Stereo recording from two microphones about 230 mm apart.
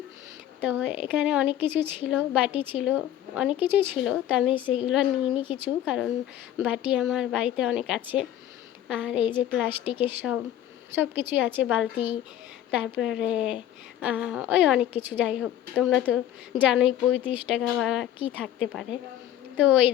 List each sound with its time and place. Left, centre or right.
0.6 s a woman's voice: centre